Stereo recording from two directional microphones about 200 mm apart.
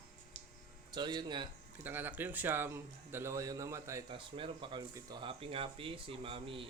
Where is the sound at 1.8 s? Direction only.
10° right (ahead or behind); by 6.6 s 25° right (ahead or behind).